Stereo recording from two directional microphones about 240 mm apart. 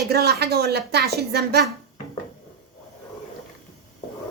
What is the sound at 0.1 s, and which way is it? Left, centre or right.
Speech, right.